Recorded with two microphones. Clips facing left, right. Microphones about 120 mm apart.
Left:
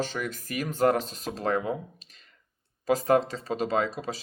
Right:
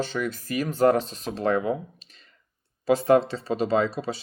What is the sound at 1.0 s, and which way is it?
Speech, 40° left (ahead or behind).